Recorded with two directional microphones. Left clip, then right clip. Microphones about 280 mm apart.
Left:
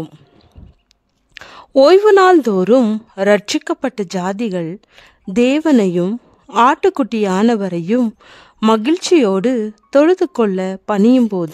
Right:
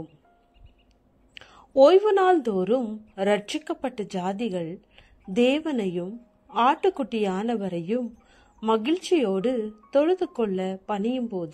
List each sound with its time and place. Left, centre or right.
1.3 s a woman's voice: left
11.0 s speech: left